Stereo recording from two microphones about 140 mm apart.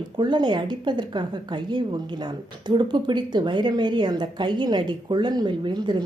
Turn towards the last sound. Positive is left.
turn(degrees=-30)  # may be behind; listen again after turning